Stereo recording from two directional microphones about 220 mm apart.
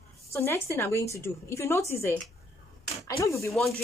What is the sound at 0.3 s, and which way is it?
Speech, 10° left (ahead or behind).